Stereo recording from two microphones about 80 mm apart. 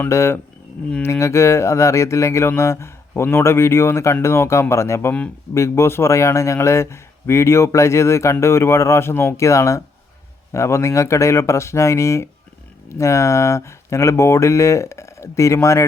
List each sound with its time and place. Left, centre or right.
0.1 s a man's voice: left